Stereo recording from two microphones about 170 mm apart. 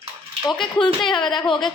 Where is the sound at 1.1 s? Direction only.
25° left (ahead or behind).